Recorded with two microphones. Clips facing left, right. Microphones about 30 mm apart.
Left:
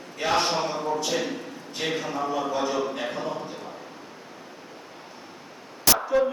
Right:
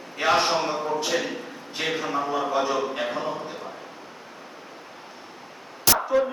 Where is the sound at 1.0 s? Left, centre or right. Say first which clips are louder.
Right 1 dB; centre.